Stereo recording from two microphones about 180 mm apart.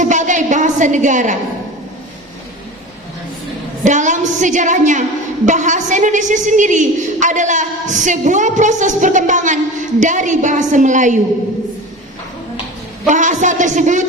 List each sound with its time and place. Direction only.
0.0 s a woman's voice: 45° right (ahead or behind)
3.8 s a woman's voice: 45° right (ahead or behind)
13.1 s a woman's voice: 45° right (ahead or behind)